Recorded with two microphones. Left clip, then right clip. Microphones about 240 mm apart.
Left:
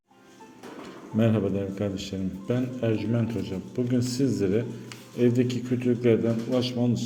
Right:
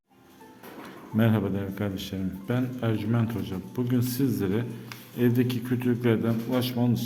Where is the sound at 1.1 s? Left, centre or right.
Centre.